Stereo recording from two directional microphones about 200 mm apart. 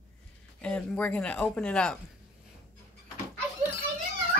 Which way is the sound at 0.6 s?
5° left (ahead or behind).